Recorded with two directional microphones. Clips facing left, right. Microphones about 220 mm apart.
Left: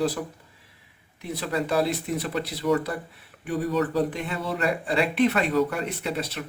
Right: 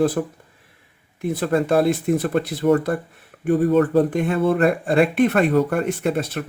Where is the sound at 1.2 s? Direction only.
50° right (ahead or behind).